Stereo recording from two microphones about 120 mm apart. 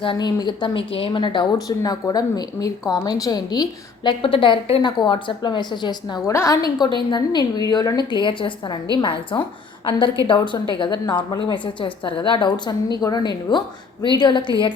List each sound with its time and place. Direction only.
0.0 s speech: 40° left (ahead or behind)
4.2 s speech: 45° left (ahead or behind)
6.2 s a woman's voice: 25° left (ahead or behind)
6.7 s a woman's voice: 35° left (ahead or behind)